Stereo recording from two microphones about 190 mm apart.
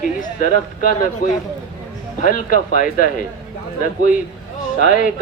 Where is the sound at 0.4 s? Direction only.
45° left (ahead or behind).